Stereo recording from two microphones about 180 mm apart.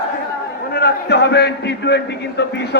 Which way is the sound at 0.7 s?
60° left (ahead or behind).